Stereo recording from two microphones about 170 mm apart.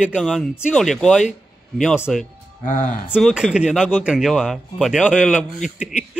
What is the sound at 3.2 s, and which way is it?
Speech, 5° right (ahead or behind).